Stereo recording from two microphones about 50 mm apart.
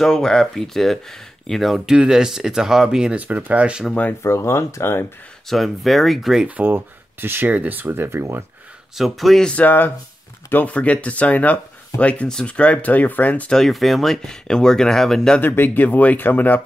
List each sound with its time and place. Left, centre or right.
0.0 s speech: centre
1.9 s speech: centre
3.2 s speech: right
4.2 s speech: left
5.5 s speech: centre
6.4 s speech: right
8.9 s speech: centre
9.4 s speech: left
9.7 s speech: left
10.5 s speech: left
13.5 s speech: centre
15.4 s speech: left